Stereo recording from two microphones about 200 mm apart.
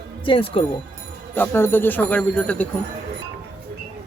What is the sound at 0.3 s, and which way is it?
Speech, 25° left (ahead or behind).